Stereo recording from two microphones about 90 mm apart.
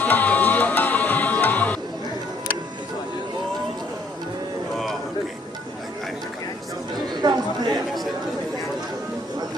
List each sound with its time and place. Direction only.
0.0 s music: 20° left (ahead or behind)
7.2 s chatter: 50° right (ahead or behind)